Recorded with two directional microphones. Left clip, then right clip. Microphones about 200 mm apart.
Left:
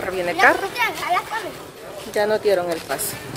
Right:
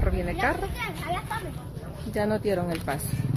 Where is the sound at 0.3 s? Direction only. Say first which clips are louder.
Left 13 dB; 5° left (ahead or behind).